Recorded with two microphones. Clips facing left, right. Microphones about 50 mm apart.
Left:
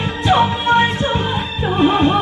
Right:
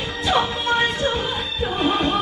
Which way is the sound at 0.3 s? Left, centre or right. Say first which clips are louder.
Left 6 dB; centre.